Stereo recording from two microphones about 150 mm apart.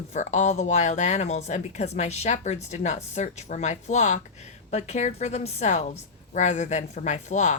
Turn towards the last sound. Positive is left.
turn(degrees=50)  # may be behind; listen again after turning